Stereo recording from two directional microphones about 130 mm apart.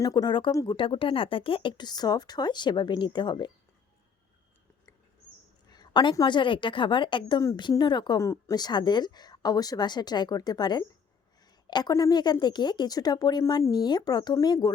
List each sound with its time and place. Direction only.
0.0 s speech: 30° left (ahead or behind)
5.7 s speech: 35° left (ahead or behind)
8.2 s speech: 25° left (ahead or behind)